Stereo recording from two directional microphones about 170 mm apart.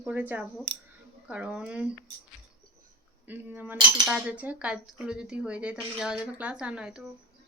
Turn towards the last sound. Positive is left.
turn(degrees=-5)  # may be behind; listen again after turning